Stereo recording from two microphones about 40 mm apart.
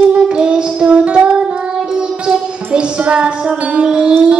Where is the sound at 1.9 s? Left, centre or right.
Centre.